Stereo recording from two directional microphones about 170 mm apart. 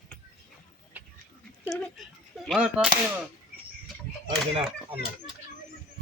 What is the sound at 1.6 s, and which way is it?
Speech, centre (ahead or behind).